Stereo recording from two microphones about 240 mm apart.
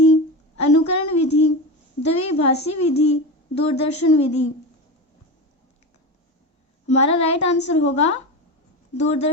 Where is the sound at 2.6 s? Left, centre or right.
Left.